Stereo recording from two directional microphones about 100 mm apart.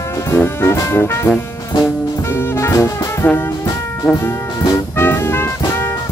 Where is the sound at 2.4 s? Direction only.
25° left (ahead or behind).